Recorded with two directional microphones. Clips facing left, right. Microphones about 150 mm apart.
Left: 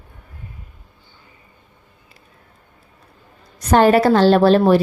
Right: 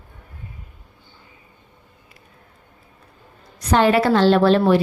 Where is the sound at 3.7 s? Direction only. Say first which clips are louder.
Left 3 dB; 45° left (ahead or behind).